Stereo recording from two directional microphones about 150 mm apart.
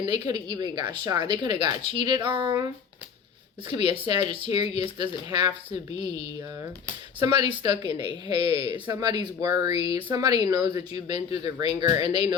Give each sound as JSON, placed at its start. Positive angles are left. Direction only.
{"t": 0.0, "sound": "speech", "side_deg": -30}
{"t": 3.8, "sound": "speech", "side_deg": -35}